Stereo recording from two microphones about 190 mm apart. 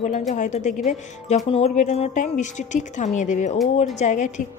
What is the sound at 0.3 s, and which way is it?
Speech, 40° left (ahead or behind).